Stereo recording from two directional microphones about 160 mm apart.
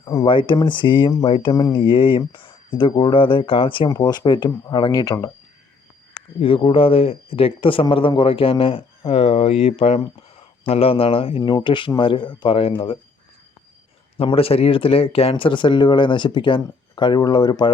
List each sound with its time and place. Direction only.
0.0 s speech: 25° left (ahead or behind)
6.4 s speech: 35° left (ahead or behind)
14.2 s speech: 35° left (ahead or behind)